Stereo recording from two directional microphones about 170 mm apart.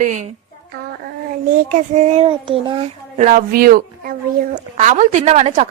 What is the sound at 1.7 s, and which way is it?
A child's voice, 40° right (ahead or behind).